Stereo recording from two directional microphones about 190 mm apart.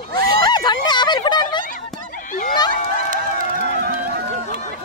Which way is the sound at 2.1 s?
45° left (ahead or behind).